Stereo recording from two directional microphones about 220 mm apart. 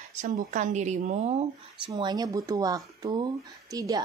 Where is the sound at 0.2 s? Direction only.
35° right (ahead or behind).